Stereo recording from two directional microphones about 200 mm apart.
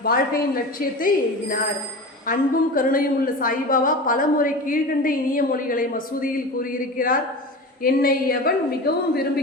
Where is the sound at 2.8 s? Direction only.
45° left (ahead or behind).